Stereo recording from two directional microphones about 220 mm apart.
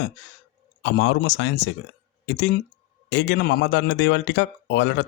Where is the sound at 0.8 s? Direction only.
55° left (ahead or behind).